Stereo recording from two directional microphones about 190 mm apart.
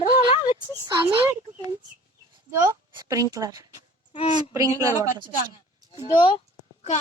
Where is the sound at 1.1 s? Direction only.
30° right (ahead or behind).